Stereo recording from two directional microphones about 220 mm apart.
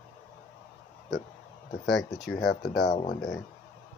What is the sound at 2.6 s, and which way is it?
Speech, 40° left (ahead or behind).